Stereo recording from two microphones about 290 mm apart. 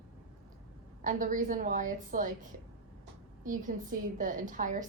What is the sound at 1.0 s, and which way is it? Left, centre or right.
A woman's voice, right.